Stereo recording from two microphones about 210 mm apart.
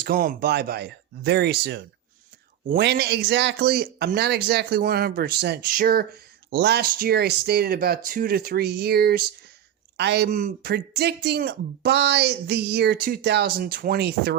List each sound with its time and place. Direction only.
0.0 s speech: 45° right (ahead or behind)